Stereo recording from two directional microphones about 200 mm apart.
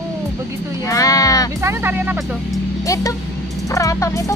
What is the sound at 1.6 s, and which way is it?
Speech, 10° right (ahead or behind).